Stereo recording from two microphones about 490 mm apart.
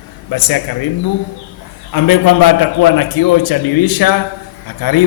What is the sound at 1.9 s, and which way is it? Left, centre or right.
A man's voice, left.